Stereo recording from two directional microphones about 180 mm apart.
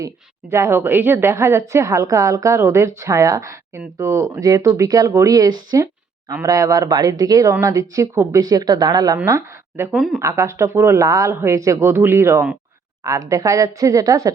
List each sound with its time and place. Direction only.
0.5 s a woman's voice: 15° right (ahead or behind)